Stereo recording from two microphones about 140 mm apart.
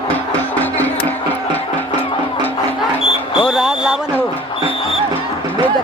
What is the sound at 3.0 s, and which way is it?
Music, 40° left (ahead or behind).